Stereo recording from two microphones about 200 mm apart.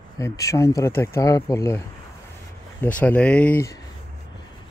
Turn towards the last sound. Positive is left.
turn(degrees=10)  # may be behind; listen again after turning